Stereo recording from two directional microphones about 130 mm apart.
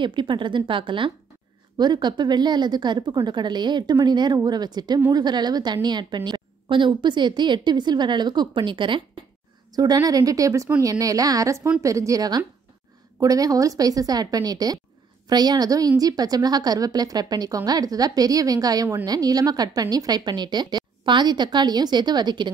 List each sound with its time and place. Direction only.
0.0 s a woman's voice: 40° right (ahead or behind)